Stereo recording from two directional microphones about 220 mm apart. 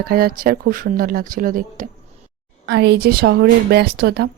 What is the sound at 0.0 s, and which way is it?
Speech, 40° right (ahead or behind).